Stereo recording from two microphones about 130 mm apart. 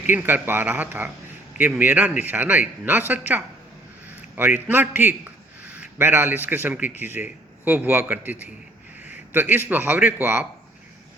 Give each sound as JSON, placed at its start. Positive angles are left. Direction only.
{"t": 0.1, "sound": "a man's voice", "side_deg": -15}